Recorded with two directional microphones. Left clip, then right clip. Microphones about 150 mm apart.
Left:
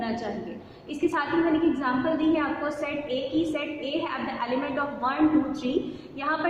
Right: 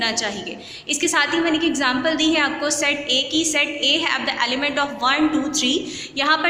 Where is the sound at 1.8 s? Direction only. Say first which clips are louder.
Right 6 dB; 20° right (ahead or behind).